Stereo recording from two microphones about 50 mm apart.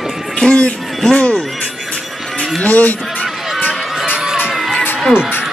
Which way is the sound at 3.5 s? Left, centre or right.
Left.